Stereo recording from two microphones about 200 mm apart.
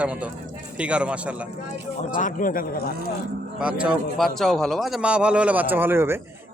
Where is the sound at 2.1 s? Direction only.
40° left (ahead or behind).